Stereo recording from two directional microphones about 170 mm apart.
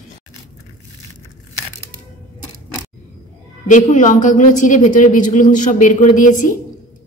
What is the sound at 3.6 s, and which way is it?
Speech, 50° left (ahead or behind).